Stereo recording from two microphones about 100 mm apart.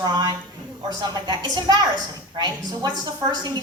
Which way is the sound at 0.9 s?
45° right (ahead or behind).